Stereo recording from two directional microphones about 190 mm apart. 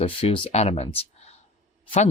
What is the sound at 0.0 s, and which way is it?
Speech, 30° left (ahead or behind).